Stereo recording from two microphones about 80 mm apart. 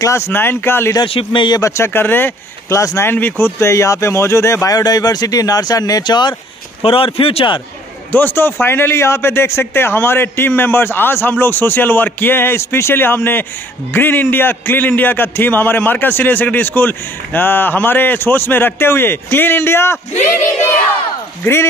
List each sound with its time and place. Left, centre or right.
0.0 s a man's voice: left
1.3 s speech: left
1.6 s a man's voice: left
2.7 s speech: left
3.1 s speech: left
7.2 s speech: left
8.1 s a man's voice: left